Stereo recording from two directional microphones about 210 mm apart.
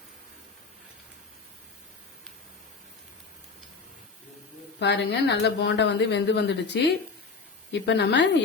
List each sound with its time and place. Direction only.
4.8 s speech: 55° left (ahead or behind)
7.7 s speech: 55° left (ahead or behind)